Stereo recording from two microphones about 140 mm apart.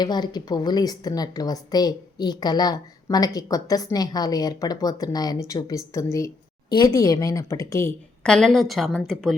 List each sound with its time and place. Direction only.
0.0 s a woman's voice: 30° left (ahead or behind)
8.2 s a woman's voice: 5° left (ahead or behind)